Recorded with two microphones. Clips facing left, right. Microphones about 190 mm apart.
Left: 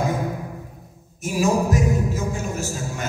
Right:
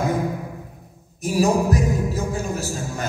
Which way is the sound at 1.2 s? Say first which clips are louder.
Right 2 dB; 35° right (ahead or behind).